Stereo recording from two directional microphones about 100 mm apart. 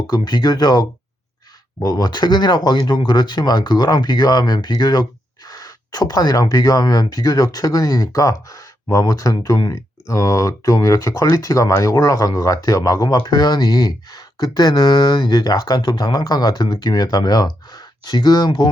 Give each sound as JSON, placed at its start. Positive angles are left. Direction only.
{"t": 0.1, "sound": "speech", "side_deg": 45}